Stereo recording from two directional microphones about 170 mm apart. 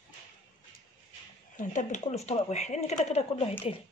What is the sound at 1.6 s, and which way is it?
Speech, 45° left (ahead or behind).